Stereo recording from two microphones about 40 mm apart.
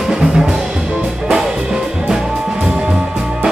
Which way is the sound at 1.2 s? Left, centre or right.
Centre.